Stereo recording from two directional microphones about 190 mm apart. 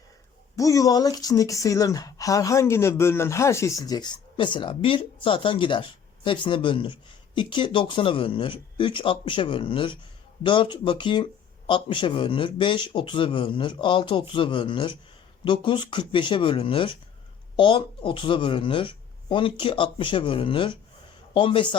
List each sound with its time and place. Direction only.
0.5 s speech: 15° left (ahead or behind)